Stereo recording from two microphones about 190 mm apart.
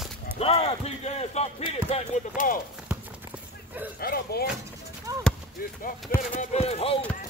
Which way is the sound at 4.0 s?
55° left (ahead or behind).